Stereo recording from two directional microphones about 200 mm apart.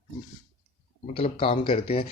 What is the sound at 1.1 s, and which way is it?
Speech, 25° left (ahead or behind).